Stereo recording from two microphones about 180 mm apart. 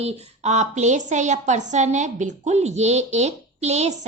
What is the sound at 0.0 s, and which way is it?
A woman's voice, 40° right (ahead or behind).